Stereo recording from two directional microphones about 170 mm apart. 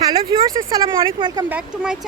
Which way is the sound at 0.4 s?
20° right (ahead or behind).